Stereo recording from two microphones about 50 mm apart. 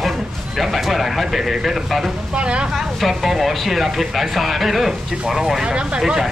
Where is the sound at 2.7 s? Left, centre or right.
Centre.